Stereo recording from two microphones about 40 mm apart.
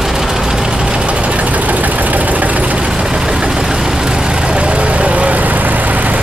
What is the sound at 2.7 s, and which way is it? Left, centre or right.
Vehicle, right.